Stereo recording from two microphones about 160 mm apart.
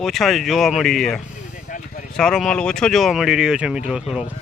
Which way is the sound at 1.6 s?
55° left (ahead or behind).